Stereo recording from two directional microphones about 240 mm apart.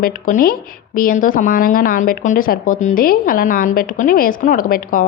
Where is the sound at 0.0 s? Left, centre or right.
Left.